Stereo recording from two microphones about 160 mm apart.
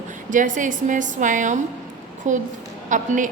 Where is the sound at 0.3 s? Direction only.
55° right (ahead or behind).